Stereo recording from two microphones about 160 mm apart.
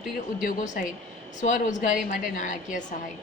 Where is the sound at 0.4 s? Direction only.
55° left (ahead or behind).